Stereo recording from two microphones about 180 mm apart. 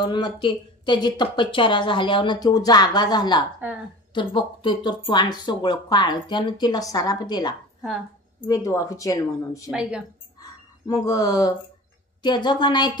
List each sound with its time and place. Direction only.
0.0 s speech: 25° left (ahead or behind)
7.8 s a sound: centre (ahead or behind)
8.5 s speech: 20° left (ahead or behind)
9.7 s a woman's voice: 5° right (ahead or behind)
10.9 s speech: 20° left (ahead or behind)